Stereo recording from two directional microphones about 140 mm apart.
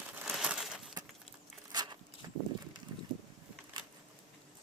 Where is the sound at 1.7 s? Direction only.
30° right (ahead or behind).